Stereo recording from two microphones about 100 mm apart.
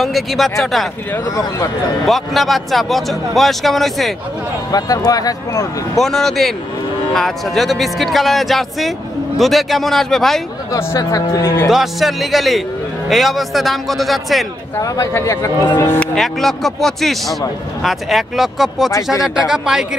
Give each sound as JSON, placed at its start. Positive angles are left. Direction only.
{"t": 0.0, "sound": "speech", "side_deg": 0}
{"t": 1.3, "sound": "speech", "side_deg": 35}
{"t": 2.0, "sound": "speech", "side_deg": 0}
{"t": 4.6, "sound": "speech", "side_deg": 40}
{"t": 5.9, "sound": "speech", "side_deg": 5}
{"t": 11.0, "sound": "speech", "side_deg": 35}
{"t": 11.4, "sound": "speech", "side_deg": 25}
{"t": 11.7, "sound": "speech", "side_deg": 0}
{"t": 14.8, "sound": "speech", "side_deg": 30}
{"t": 16.2, "sound": "speech", "side_deg": 5}